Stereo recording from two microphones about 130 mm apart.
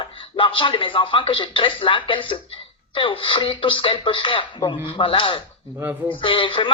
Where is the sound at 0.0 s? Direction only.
40° left (ahead or behind).